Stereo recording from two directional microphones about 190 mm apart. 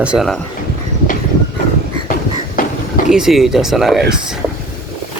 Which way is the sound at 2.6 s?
45° left (ahead or behind).